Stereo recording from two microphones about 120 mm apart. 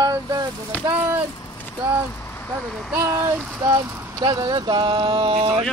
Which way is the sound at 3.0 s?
25° right (ahead or behind).